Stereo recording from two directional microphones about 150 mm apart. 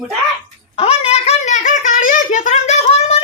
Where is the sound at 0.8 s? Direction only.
40° left (ahead or behind).